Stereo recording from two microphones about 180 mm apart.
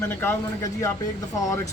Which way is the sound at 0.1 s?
10° left (ahead or behind).